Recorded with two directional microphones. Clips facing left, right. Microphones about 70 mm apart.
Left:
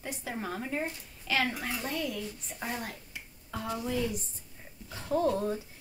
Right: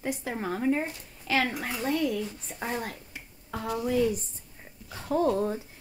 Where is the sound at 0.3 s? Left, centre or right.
Right.